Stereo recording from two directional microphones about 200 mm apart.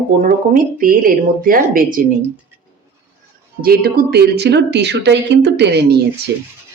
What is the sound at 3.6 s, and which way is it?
Speech, 50° right (ahead or behind).